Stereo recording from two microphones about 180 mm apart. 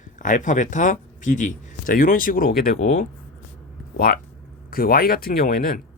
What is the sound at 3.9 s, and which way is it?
Speech, 55° left (ahead or behind).